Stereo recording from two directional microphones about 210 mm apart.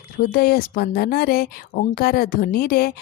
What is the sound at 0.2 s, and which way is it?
Speech, 45° left (ahead or behind).